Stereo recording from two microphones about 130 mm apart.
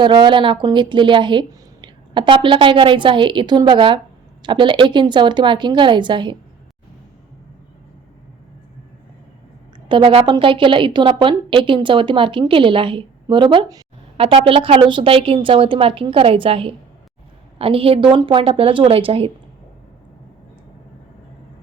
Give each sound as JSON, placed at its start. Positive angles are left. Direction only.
{"t": 0.0, "sound": "a woman's voice", "side_deg": -35}
{"t": 9.9, "sound": "a woman's voice", "side_deg": -45}
{"t": 14.2, "sound": "a woman's voice", "side_deg": -45}